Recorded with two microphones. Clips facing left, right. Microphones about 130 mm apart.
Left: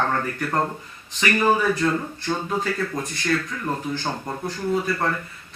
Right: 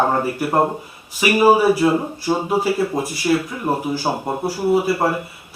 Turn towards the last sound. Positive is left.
turn(degrees=-15)  # may be behind; listen again after turning